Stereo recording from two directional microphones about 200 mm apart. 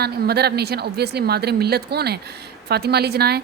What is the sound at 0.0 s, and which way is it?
A woman's voice, 55° right (ahead or behind).